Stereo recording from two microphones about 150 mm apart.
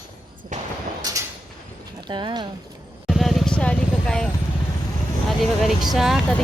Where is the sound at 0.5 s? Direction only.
55° right (ahead or behind).